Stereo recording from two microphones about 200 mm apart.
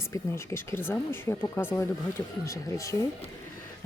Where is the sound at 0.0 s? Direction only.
15° left (ahead or behind).